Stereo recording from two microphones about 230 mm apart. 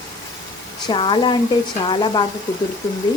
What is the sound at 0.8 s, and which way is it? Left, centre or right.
Speech, centre.